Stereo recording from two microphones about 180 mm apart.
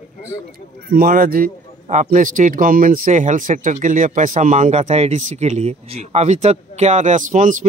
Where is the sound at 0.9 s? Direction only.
55° right (ahead or behind).